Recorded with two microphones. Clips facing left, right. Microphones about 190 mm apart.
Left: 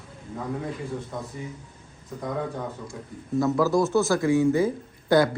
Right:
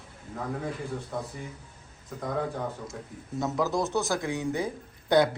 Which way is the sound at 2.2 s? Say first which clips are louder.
Left 1 dB; centre (ahead or behind).